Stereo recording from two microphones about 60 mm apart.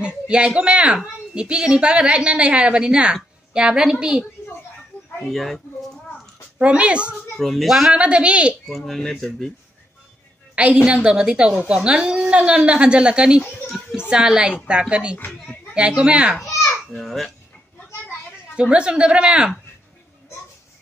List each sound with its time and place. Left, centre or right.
0.0 s a woman's voice: centre
5.3 s speech: centre
6.6 s speech: centre
7.3 s speech: centre
7.9 s a woman's voice: centre
8.6 s speech: centre
10.5 s a woman's voice: centre
16.9 s speech: centre
18.6 s a woman's voice: centre